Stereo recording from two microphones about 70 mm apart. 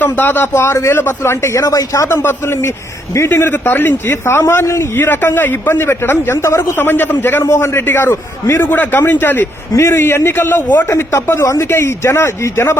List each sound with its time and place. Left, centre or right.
0.0 s a man's voice: left
1.6 s speech: left
2.0 s a man's voice: left
6.7 s a man's voice: left
8.6 s speech: left
9.7 s a man's voice: left